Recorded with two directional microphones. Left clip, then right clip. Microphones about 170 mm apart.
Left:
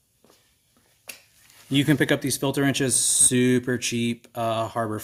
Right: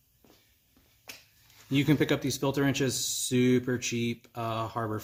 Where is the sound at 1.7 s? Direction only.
30° left (ahead or behind).